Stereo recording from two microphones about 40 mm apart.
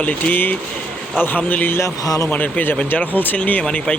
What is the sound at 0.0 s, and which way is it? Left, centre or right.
Speech, left.